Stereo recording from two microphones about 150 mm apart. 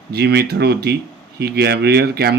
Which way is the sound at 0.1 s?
90° right.